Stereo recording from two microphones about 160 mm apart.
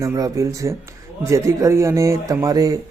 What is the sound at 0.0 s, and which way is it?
Speech, 20° right (ahead or behind).